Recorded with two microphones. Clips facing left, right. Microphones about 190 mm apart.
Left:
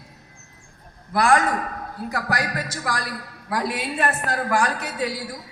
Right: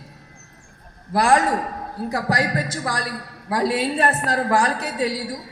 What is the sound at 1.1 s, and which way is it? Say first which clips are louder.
A man's voice: right 1 dB; 30° right (ahead or behind).